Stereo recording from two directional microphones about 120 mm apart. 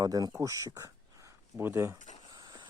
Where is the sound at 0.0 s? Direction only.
30° right (ahead or behind).